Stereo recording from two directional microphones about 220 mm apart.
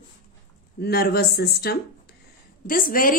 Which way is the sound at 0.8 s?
45° left (ahead or behind).